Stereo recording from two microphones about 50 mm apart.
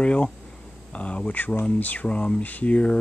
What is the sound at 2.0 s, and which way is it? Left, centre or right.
Speech, left.